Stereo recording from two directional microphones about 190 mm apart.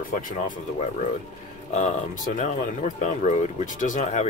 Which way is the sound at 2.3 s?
40° left (ahead or behind).